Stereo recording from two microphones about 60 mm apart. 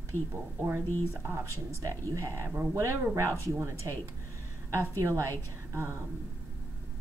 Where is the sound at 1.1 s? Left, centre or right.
Right.